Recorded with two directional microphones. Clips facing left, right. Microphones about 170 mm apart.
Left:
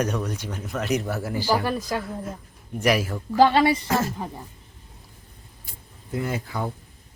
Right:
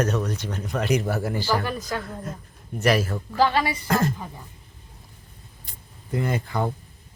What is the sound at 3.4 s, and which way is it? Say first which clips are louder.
Speech: left 4 dB; 25° left (ahead or behind).